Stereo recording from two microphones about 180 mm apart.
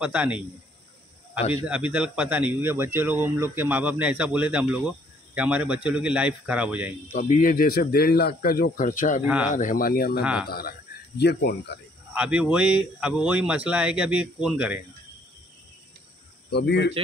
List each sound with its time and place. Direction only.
0.0 s speech: 5° right (ahead or behind)
1.5 s speech: 10° right (ahead or behind)
7.1 s speech: 45° left (ahead or behind)
9.2 s speech: 5° right (ahead or behind)
9.5 s speech: 45° left (ahead or behind); by 11.8 s 65° left (ahead or behind)
12.1 s speech: 5° right (ahead or behind)
16.4 s speech: 65° left (ahead or behind)